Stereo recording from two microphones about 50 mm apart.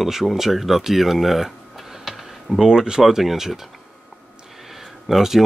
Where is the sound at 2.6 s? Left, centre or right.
Centre.